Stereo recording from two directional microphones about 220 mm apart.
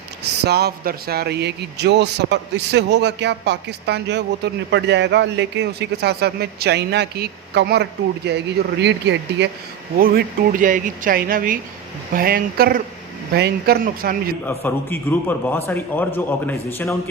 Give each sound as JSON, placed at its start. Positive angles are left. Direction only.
{"t": 0.2, "sound": "speech", "side_deg": -50}
{"t": 10.0, "sound": "speech", "side_deg": -40}
{"t": 14.4, "sound": "a man's voice", "side_deg": 10}